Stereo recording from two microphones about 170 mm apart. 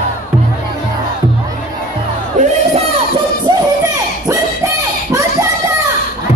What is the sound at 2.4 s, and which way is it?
Music, 45° right (ahead or behind).